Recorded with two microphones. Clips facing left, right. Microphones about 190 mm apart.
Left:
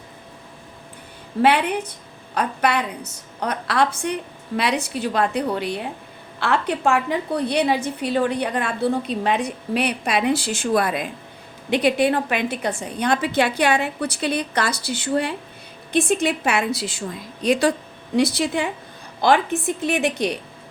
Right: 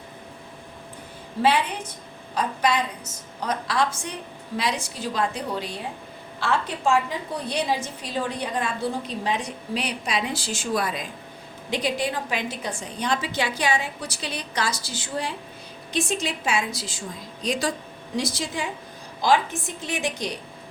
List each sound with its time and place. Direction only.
1.4 s a woman's voice: 60° left (ahead or behind)